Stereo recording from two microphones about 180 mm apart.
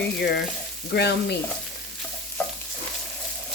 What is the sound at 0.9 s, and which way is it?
Speech, 65° left (ahead or behind).